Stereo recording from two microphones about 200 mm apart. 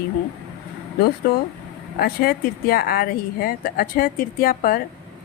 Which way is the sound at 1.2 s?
45° left (ahead or behind).